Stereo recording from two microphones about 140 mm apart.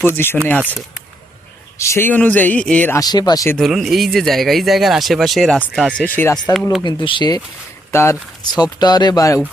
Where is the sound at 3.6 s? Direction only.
Centre (ahead or behind).